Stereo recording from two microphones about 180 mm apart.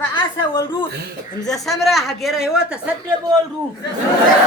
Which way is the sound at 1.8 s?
Centre (ahead or behind).